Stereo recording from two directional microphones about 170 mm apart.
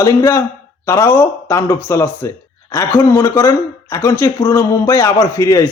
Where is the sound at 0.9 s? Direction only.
15° left (ahead or behind).